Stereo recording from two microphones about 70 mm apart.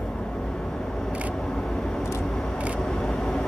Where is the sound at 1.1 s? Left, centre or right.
Centre.